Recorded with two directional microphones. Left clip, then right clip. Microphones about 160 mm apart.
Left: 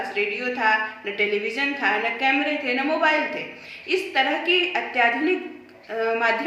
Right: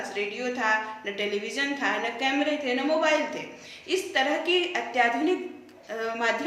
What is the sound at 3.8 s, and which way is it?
A woman's voice, 35° right (ahead or behind).